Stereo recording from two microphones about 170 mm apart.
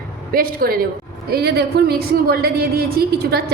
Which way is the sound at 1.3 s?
70° right (ahead or behind).